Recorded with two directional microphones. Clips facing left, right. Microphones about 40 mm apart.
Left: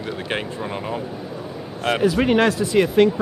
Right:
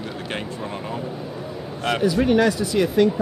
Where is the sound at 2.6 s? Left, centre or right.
Left.